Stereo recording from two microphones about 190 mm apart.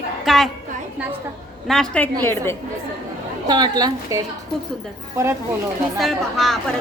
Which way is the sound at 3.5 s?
20° right (ahead or behind).